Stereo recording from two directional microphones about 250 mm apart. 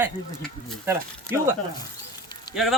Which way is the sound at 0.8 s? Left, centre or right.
Centre.